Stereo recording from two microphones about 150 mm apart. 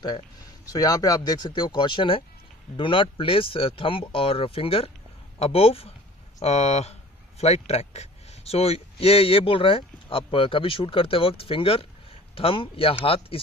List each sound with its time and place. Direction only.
0.7 s speech: 25° left (ahead or behind)